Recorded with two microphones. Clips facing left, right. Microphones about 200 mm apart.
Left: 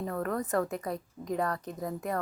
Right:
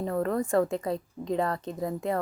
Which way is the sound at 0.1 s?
25° right (ahead or behind).